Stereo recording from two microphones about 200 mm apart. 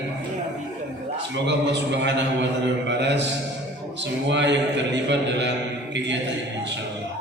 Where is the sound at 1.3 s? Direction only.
60° right (ahead or behind).